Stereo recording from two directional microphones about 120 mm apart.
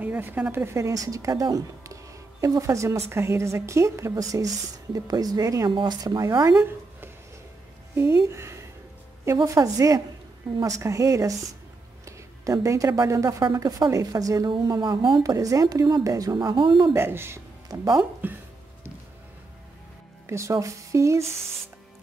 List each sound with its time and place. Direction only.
0.0 s a woman's voice: 15° right (ahead or behind); by 14.5 s 30° right (ahead or behind)
14.8 s speech: 40° right (ahead or behind)
15.2 s speech: 30° right (ahead or behind)
16.9 s a woman's voice: 20° right (ahead or behind)
17.6 s speech: 30° right (ahead or behind)
18.2 s speech: 15° right (ahead or behind)
20.2 s a woman's voice: 25° right (ahead or behind)